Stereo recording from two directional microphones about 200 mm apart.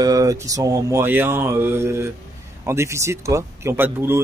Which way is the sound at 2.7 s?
15° right (ahead or behind).